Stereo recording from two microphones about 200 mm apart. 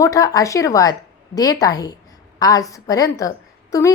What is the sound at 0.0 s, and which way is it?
A woman's voice, 15° left (ahead or behind).